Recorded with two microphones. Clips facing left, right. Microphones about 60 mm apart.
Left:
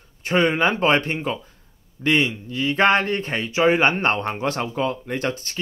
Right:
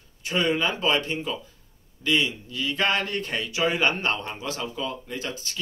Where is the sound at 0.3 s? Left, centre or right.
Left.